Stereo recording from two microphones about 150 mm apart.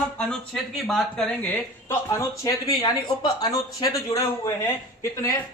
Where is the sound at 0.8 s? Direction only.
Centre (ahead or behind).